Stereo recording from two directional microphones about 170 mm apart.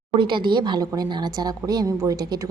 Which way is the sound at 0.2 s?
30° right (ahead or behind).